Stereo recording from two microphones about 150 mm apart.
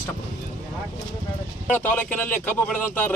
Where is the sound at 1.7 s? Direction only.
10° left (ahead or behind).